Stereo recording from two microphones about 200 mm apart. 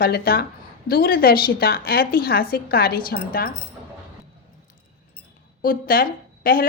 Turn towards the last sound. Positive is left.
turn(degrees=45)  # may be behind; listen again after turning